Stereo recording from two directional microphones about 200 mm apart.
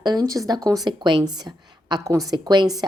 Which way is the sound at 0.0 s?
20° right (ahead or behind).